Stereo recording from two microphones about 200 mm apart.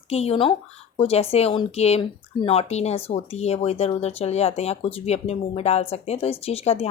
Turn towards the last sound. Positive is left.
turn(degrees=30)  # may be behind; listen again after turning